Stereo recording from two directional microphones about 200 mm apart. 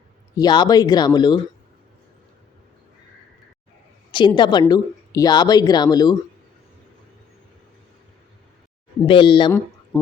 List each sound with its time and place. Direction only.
0.3 s speech: 20° left (ahead or behind)
4.4 s speech: 20° left (ahead or behind)
9.0 s speech: 25° left (ahead or behind)
9.5 s a sound: 10° left (ahead or behind)